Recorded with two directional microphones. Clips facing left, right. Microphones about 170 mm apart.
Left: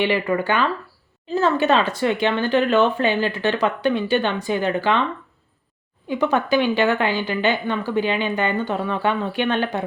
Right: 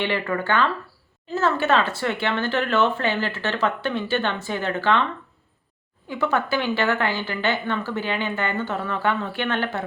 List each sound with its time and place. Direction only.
0.0 s speech: 15° left (ahead or behind)
6.1 s speech: 15° left (ahead or behind)